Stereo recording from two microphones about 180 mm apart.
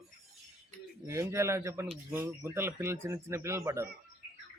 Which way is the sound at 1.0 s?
15° right (ahead or behind).